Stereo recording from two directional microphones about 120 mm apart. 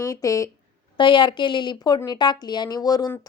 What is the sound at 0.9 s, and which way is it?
Speech, 40° left (ahead or behind).